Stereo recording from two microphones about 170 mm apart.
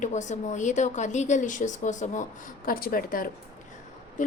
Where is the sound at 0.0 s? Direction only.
45° left (ahead or behind).